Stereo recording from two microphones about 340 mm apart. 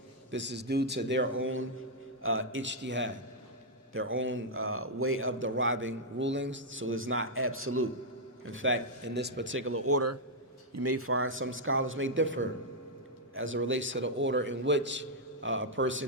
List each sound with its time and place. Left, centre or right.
0.3 s a man's voice: right